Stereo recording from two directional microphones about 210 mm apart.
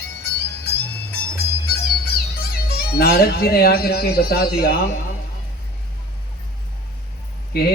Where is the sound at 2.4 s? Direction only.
45° left (ahead or behind).